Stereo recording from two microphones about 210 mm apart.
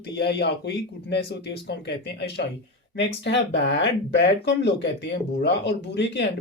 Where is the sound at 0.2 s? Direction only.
55° left (ahead or behind).